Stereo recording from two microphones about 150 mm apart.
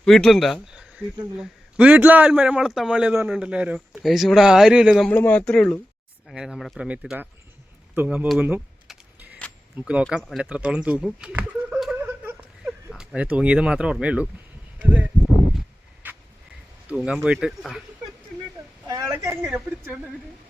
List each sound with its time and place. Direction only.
0.0 s a man's voice: 5° left (ahead or behind)
5.0 s a man's voice: 10° left (ahead or behind); by 7.3 s 5° right (ahead or behind)
7.9 s keys jangling: 10° right (ahead or behind)
9.7 s speech: 10° right (ahead or behind)
11.9 s whimper: 15° right (ahead or behind)
12.9 s speech: 5° right (ahead or behind)
16.0 s a sound: 10° right (ahead or behind)
16.9 s a man's voice: 5° right (ahead or behind)
18.9 s speech: 20° right (ahead or behind)
19.3 s a man's voice: 5° right (ahead or behind)